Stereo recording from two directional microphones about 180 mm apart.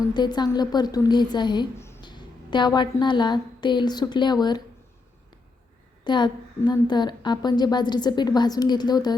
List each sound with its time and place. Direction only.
0.1 s a woman's voice: 25° left (ahead or behind)
6.1 s a woman's voice: 25° left (ahead or behind)
6.6 s a woman's voice: 15° left (ahead or behind)
6.8 s a woman's voice: 25° left (ahead or behind)